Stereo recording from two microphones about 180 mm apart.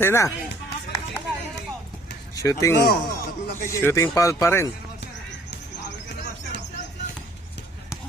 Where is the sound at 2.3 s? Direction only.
15° left (ahead or behind).